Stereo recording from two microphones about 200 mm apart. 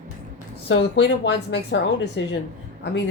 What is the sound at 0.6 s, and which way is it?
A woman's voice, 60° left (ahead or behind).